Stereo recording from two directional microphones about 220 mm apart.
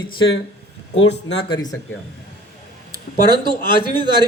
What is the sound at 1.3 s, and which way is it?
Speech, 20° left (ahead or behind).